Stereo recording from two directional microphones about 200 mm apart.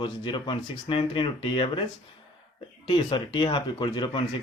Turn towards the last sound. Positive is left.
turn(degrees=25)  # may be behind; listen again after turning